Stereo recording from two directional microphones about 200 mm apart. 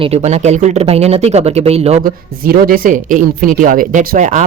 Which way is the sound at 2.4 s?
50° right (ahead or behind).